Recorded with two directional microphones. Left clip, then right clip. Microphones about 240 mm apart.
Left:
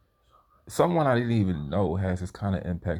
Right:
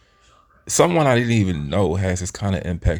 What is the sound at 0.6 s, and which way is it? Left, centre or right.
Speech, right.